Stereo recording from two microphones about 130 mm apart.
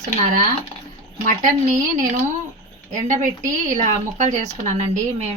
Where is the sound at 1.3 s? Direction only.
80° right.